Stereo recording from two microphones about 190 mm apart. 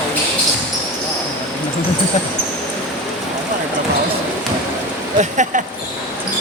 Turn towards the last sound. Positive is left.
turn(degrees=-40)  # may be behind; listen again after turning